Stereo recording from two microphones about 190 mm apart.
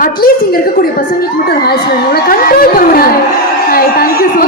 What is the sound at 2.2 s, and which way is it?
A woman's voice, 50° left (ahead or behind).